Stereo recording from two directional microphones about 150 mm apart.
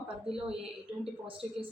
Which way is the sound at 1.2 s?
35° right (ahead or behind).